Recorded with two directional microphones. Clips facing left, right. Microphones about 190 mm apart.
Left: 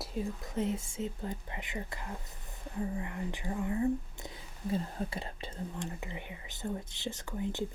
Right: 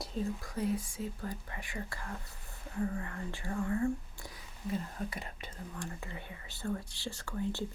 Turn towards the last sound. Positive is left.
turn(degrees=20)  # may be behind; listen again after turning